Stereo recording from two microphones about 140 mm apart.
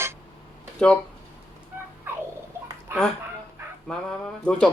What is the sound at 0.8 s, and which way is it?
Speech, 5° left (ahead or behind).